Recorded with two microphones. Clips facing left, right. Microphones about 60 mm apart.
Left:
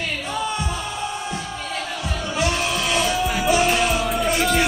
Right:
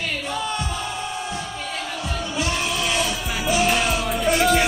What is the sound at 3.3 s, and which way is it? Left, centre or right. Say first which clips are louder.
Music: even; centre.